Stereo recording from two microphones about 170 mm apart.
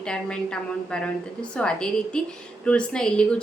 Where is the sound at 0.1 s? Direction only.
5° left (ahead or behind).